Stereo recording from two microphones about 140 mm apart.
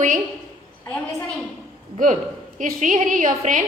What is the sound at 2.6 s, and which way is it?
A woman's voice, 65° right (ahead or behind).